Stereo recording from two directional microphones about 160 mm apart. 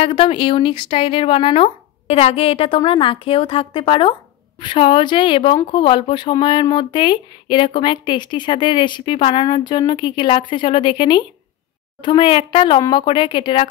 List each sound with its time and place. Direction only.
0.0 s speech: 35° left (ahead or behind)